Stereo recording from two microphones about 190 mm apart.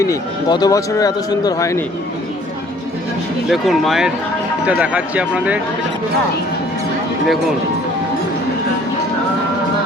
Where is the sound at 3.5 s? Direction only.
Centre (ahead or behind).